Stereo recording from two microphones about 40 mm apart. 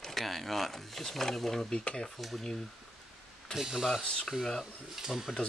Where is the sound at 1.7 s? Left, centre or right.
Left.